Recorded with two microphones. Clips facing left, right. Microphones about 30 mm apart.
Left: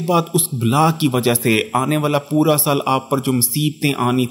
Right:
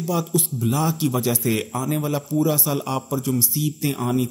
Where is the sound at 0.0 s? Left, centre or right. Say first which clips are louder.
Left 6 dB; left.